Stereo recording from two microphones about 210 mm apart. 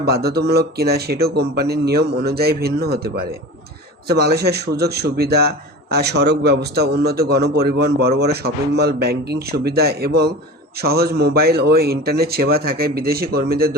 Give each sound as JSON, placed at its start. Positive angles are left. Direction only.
{"t": 0.0, "sound": "a man's voice", "side_deg": -50}